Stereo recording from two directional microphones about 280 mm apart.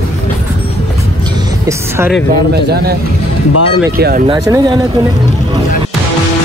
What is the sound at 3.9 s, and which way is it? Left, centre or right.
Speech, right.